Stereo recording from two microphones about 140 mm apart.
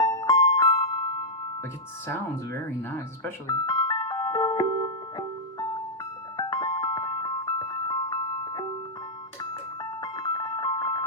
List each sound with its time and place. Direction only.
0.0 s music: 25° left (ahead or behind)
2.0 s speech: 15° left (ahead or behind)
3.4 s music: 25° left (ahead or behind)
10.0 s music: 30° left (ahead or behind)